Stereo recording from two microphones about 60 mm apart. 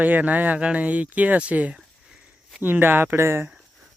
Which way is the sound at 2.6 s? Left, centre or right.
Right.